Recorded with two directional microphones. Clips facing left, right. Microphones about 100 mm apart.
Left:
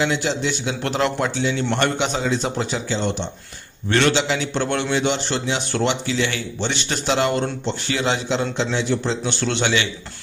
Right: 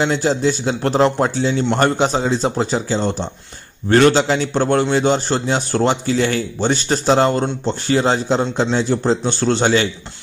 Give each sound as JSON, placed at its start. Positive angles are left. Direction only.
{"t": 0.0, "sound": "a man's voice", "side_deg": -40}